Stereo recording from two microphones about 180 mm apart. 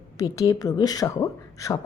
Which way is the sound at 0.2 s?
20° left (ahead or behind).